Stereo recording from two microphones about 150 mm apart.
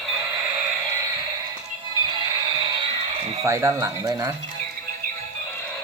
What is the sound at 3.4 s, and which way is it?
Speech, 20° right (ahead or behind).